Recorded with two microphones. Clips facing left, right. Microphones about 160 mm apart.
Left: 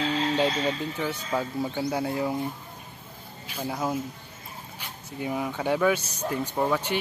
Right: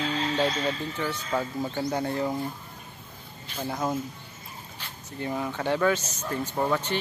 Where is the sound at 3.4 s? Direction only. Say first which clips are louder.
Even; 10° left (ahead or behind).